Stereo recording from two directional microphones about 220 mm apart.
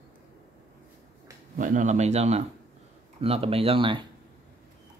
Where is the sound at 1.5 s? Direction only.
35° right (ahead or behind).